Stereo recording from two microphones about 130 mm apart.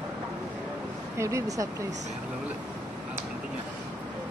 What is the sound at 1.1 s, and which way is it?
Speech, 20° right (ahead or behind).